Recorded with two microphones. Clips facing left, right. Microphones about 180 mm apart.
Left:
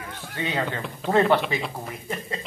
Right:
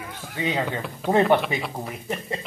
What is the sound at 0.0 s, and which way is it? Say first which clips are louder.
Speech: right 2 dB; 5° right (ahead or behind).